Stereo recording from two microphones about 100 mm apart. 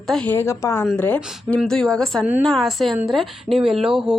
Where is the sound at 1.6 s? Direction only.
5° left (ahead or behind).